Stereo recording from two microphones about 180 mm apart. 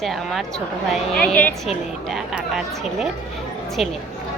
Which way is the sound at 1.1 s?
5° left (ahead or behind).